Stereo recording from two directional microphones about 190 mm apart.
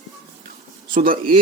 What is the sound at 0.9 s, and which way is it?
Speech, 50° right (ahead or behind).